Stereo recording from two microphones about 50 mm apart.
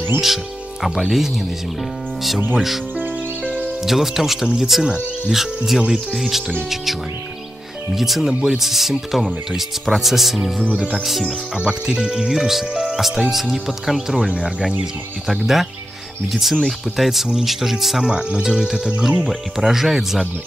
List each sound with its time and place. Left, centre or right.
0.8 s speech: centre
2.5 s speech: centre
3.8 s speech: centre
7.9 s speech: centre
10.7 s speech: centre
11.1 s speech: centre